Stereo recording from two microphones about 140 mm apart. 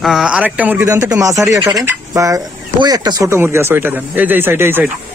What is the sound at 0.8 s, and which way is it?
A man's voice, 25° right (ahead or behind).